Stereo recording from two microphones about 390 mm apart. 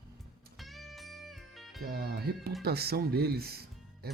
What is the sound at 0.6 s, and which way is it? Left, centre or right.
Music, centre.